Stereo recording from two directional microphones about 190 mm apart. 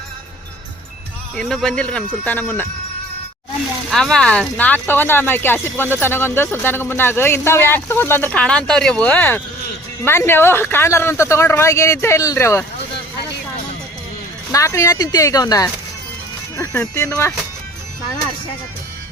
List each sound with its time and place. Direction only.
1.4 s speech: centre (ahead or behind)
3.8 s speech: centre (ahead or behind)
14.5 s speech: 15° left (ahead or behind)